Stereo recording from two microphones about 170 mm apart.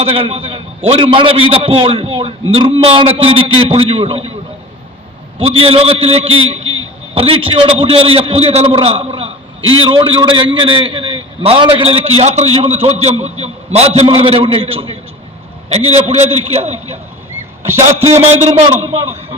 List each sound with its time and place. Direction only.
0.0 s a man's voice: 35° right (ahead or behind)
5.4 s a man's voice: 35° right (ahead or behind)
18.0 s a man's voice: 40° right (ahead or behind)